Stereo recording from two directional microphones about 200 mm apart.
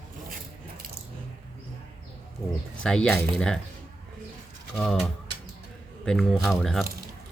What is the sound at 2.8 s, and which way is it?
Speech, 5° left (ahead or behind).